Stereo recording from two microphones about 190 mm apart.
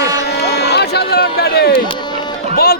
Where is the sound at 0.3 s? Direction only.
60° left (ahead or behind).